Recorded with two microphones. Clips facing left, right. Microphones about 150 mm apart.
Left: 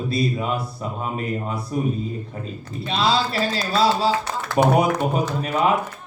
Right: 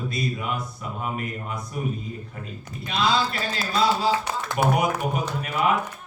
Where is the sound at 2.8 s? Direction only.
30° left (ahead or behind).